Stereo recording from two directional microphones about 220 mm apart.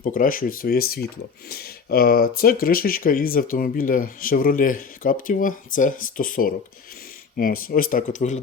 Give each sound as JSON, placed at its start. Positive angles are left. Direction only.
{"t": 0.0, "sound": "speech", "side_deg": 40}